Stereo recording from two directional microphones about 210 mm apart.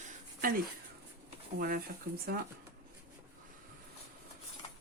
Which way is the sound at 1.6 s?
45° right (ahead or behind).